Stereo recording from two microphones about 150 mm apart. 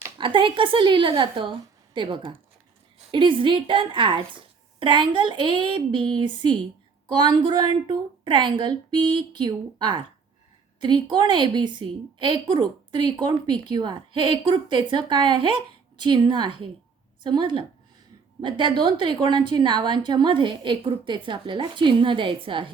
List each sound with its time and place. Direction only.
0.2 s a woman's voice: 35° right (ahead or behind)